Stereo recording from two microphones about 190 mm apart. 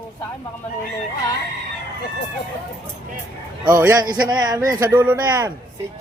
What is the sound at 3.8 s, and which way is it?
A man's voice, 15° right (ahead or behind).